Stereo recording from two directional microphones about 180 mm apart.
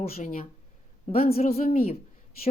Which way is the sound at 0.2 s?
40° left (ahead or behind).